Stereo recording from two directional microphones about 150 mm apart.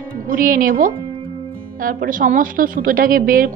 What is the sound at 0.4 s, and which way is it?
A woman's voice, 70° right (ahead or behind).